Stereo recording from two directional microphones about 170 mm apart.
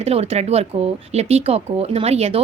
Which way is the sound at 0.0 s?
40° right (ahead or behind).